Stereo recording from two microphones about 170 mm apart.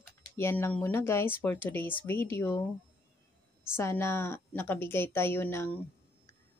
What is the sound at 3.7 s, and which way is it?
Speech, 15° left (ahead or behind).